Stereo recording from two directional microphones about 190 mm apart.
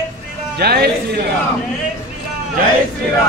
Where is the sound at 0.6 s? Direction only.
60° right (ahead or behind).